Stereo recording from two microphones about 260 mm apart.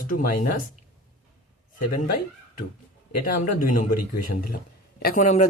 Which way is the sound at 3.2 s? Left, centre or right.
Left.